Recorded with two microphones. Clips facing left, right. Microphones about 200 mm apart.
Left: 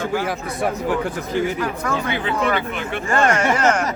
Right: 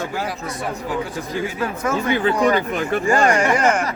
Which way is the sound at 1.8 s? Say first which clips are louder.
Right 3 dB; 20° right (ahead or behind).